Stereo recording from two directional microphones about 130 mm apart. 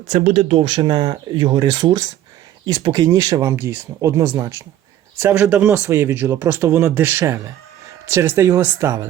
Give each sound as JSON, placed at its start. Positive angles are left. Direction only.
{"t": 0.1, "sound": "speech", "side_deg": -60}
{"t": 0.5, "sound": "speech", "side_deg": -40}